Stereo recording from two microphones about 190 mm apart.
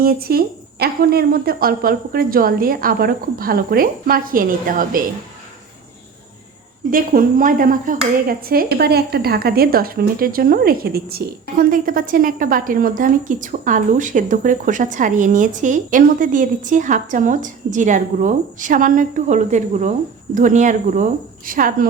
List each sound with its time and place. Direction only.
0.0 s speech: 55° right (ahead or behind)
6.9 s speech: 50° right (ahead or behind)